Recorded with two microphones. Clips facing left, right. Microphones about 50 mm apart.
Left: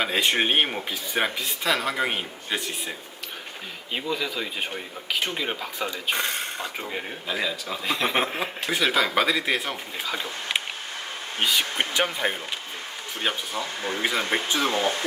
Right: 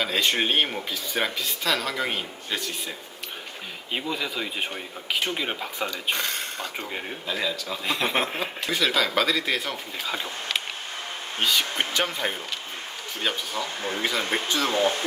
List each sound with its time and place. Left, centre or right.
0.0 s speech: left
3.9 s speech: centre
5.9 s speech: centre
6.7 s speech: centre
8.7 s speech: centre
11.3 s speech: centre; by 14.8 s left